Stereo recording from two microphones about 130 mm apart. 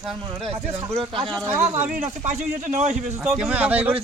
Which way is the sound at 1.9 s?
70° right (ahead or behind).